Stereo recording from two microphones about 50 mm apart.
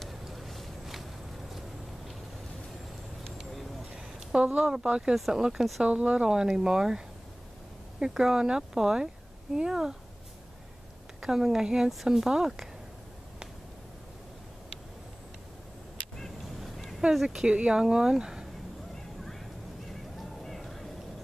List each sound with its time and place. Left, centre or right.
0.0 s vehicle: centre
3.9 s a sound: right
4.8 s speech: centre
5.1 s speech: centre
5.9 s speech: right
8.0 s speech: centre
11.1 s speech: centre
16.2 s fowl: centre
17.1 s speech: centre
17.5 s speech: right
19.9 s neigh: centre